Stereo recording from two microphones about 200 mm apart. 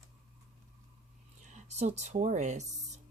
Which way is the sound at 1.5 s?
35° right (ahead or behind).